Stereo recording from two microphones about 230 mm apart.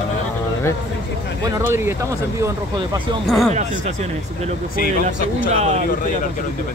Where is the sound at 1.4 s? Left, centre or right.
Centre.